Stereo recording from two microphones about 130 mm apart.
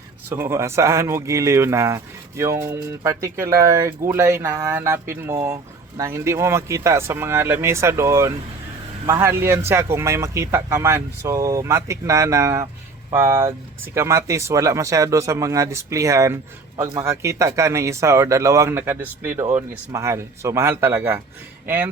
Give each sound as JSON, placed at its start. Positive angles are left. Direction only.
{"t": 0.3, "sound": "speech", "side_deg": -20}